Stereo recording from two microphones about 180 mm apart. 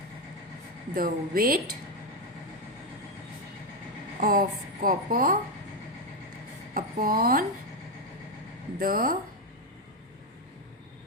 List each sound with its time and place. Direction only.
0.9 s speech: 55° right (ahead or behind)
4.2 s speech: 50° right (ahead or behind)
6.7 s speech: 55° right (ahead or behind)
8.8 s speech: 50° right (ahead or behind)